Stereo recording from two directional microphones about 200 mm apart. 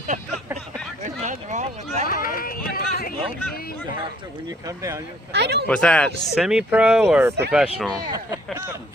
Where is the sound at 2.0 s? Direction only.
45° left (ahead or behind).